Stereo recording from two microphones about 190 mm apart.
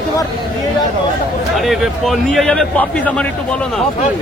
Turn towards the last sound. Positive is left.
turn(degrees=5)  # may be behind; listen again after turning